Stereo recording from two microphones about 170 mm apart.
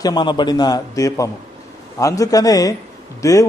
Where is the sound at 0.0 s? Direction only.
25° left (ahead or behind).